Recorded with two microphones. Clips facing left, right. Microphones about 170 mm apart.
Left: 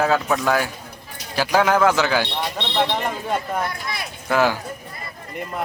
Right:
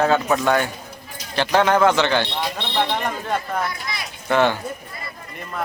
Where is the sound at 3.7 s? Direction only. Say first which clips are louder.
Left 1 dB; 55° left (ahead or behind).